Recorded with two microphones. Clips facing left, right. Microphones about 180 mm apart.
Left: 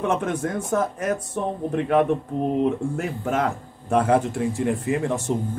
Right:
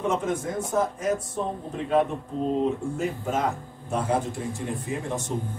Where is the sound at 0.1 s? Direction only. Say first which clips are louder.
Left 3 dB; 65° left (ahead or behind).